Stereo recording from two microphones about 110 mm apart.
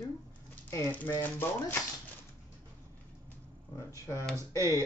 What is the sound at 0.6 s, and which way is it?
Speech, 25° left (ahead or behind).